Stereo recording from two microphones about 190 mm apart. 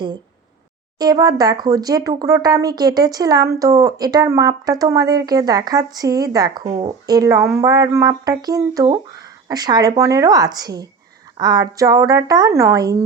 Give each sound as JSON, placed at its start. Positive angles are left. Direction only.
{"t": 0.9, "sound": "speech", "side_deg": -20}
{"t": 6.7, "sound": "speech", "side_deg": -30}
{"t": 7.1, "sound": "speech", "side_deg": -20}